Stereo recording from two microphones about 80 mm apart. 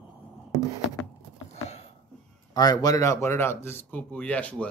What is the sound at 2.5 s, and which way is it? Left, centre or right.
Speech, left.